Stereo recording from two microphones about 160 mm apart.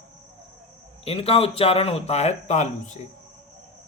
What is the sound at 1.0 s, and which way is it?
Speech, 35° left (ahead or behind).